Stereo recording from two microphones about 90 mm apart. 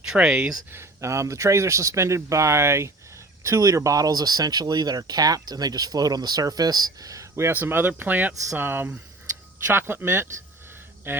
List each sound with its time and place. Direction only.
0.1 s speech: 10° right (ahead or behind)
0.7 s speech: 30° right (ahead or behind)